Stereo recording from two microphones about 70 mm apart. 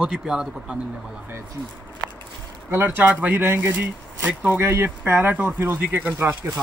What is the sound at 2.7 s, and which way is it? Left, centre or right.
Speech, right.